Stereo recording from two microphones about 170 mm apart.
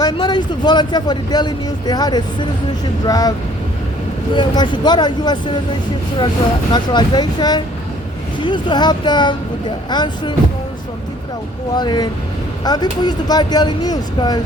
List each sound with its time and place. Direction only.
0.0 s speech: 25° left (ahead or behind)
4.4 s speech: 25° left (ahead or behind)
6.7 s speech: 25° left (ahead or behind)
11.7 s speech: 25° left (ahead or behind)